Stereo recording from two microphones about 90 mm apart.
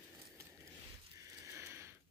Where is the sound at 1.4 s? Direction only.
30° right (ahead or behind).